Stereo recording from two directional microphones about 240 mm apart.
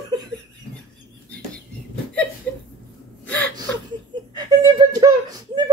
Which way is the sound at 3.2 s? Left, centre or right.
Centre.